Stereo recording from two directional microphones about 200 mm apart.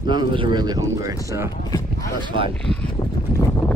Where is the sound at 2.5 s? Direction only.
5° left (ahead or behind).